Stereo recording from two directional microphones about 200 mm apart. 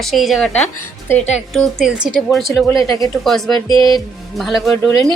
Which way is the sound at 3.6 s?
25° right (ahead or behind).